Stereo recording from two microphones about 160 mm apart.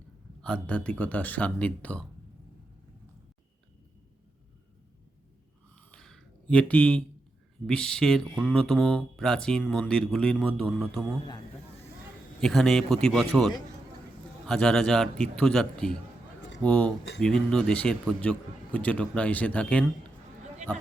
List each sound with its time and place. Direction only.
0.4 s a man's voice: 5° left (ahead or behind)
5.7 s a sound: 5° left (ahead or behind)
7.7 s speech: 5° left (ahead or behind)
12.4 s a man's voice: centre (ahead or behind)